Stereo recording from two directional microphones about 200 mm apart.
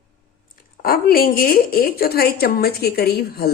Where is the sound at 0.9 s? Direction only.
50° left (ahead or behind).